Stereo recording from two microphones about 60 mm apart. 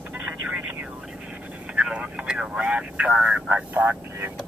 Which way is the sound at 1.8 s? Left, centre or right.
Centre.